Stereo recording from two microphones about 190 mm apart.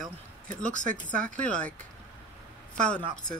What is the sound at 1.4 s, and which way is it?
Speech, 5° left (ahead or behind).